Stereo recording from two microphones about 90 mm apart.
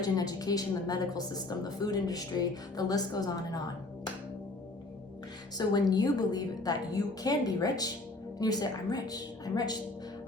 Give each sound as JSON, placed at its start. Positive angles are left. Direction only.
{"t": 0.0, "sound": "a woman's voice", "side_deg": 45}
{"t": 5.5, "sound": "a woman's voice", "side_deg": 50}